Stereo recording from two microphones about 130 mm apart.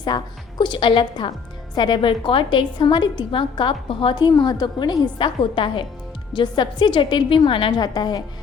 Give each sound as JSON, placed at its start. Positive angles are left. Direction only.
{"t": 0.1, "sound": "a woman's voice", "side_deg": 35}